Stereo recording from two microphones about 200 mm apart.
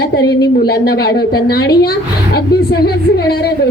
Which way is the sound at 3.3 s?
55° left (ahead or behind).